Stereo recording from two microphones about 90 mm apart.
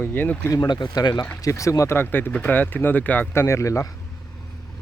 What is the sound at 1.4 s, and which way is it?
Speech, 35° left (ahead or behind).